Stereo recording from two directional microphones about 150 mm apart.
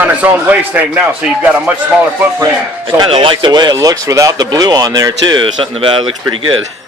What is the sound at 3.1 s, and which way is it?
Speech, 35° right (ahead or behind).